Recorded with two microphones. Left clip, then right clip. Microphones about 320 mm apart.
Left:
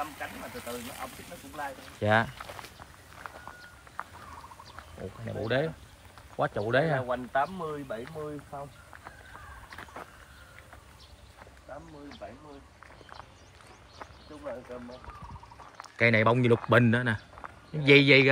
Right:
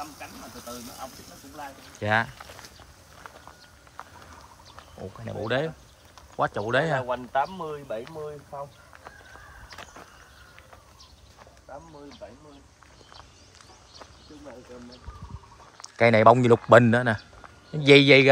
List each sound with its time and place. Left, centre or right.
1.6 s speech: centre
5.2 s speech: centre
7.1 s speech: centre
15.8 s a man's voice: centre